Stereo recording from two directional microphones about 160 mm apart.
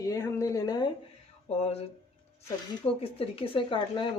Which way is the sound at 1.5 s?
40° left (ahead or behind).